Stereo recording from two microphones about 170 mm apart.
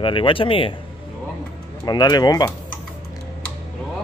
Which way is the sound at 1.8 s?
25° left (ahead or behind).